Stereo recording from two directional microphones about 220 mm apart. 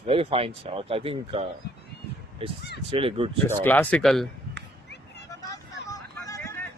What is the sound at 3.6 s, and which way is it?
Speech, 10° left (ahead or behind).